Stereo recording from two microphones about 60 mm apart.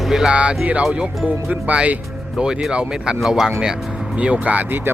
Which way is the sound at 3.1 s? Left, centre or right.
Centre.